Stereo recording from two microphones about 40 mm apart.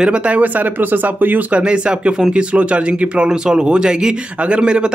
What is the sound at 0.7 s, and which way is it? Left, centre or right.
Speech, right.